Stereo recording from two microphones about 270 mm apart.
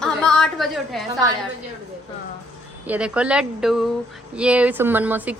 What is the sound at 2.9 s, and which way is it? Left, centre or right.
A woman's voice, centre.